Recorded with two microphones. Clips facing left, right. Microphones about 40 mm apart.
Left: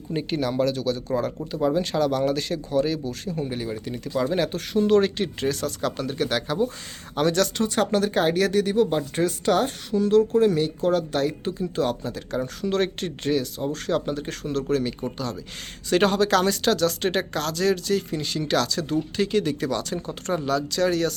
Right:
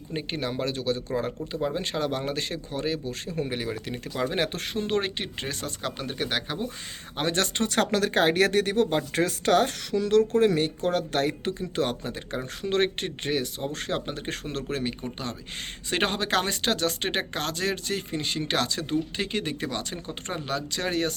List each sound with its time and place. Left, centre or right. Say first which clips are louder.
0.1 s speech: left 5 dB; centre
3.1 s speech: left 1 dB; right
3.6 s speech: left 2 dB; right
4.1 s speech: left 4 dB; right
4.9 s speech: left 9 dB; right
7.2 s speech: left 5 dB; right
7.6 s speech: left 2 dB; right